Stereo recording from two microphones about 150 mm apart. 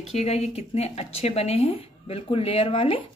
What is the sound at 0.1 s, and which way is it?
A woman's voice, 45° left (ahead or behind).